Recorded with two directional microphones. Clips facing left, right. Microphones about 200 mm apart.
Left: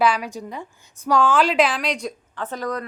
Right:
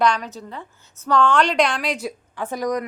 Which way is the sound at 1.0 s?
10° left (ahead or behind).